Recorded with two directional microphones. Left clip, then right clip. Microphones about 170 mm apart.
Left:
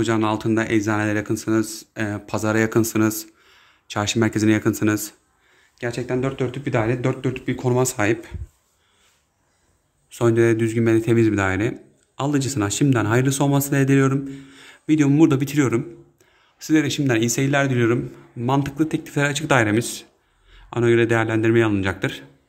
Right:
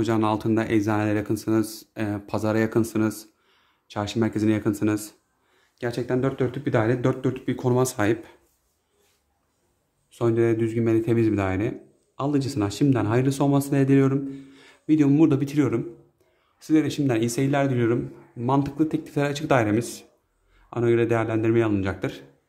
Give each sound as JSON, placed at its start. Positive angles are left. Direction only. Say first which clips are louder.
{"t": 0.0, "sound": "speech", "louder": "left 2 dB", "side_deg": -10}
{"t": 5.8, "sound": "speech", "louder": "left 1 dB", "side_deg": -15}
{"t": 10.0, "sound": "speech", "louder": "left 4 dB", "side_deg": 5}